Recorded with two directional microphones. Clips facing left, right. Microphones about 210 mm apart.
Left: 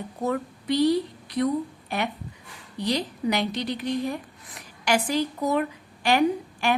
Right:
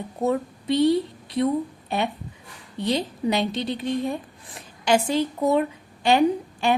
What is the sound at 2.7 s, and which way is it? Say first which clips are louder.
A woman's voice: right 2 dB; 25° right (ahead or behind).